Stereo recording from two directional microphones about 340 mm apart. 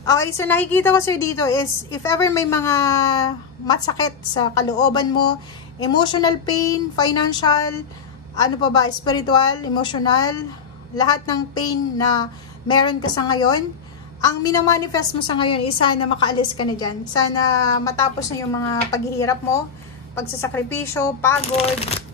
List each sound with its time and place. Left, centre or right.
0.4 s a woman's voice: centre